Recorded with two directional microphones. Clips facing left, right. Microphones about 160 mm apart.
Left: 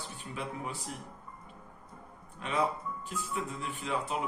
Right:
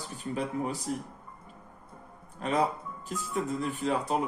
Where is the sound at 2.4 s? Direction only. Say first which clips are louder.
Right 4 dB; 40° right (ahead or behind).